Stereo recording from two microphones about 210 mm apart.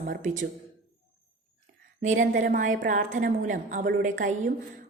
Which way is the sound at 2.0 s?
35° right (ahead or behind).